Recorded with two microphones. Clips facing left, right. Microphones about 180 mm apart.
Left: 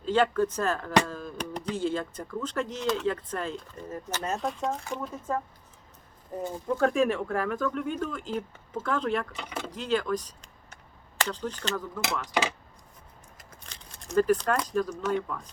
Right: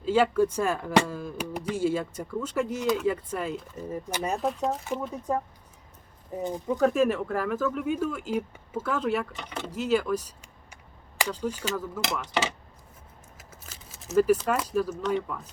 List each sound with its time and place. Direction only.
0.0 s speech: 5° right (ahead or behind)
6.7 s speech: centre (ahead or behind)
9.4 s speech: 5° left (ahead or behind)
9.6 s speech: 10° right (ahead or behind)
13.3 s a sound: 5° right (ahead or behind)
15.1 s speech: 5° right (ahead or behind)